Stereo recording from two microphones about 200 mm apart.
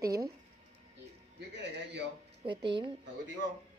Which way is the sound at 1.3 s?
60° right (ahead or behind).